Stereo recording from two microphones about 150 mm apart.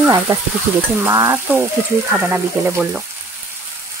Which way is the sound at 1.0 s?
20° right (ahead or behind).